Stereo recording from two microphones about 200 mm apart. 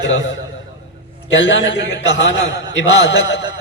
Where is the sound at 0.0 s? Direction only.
70° left (ahead or behind).